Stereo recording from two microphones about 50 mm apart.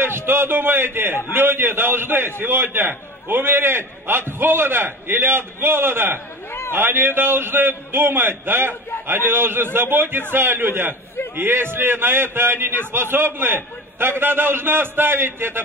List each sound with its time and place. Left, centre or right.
0.0 s a man's voice: right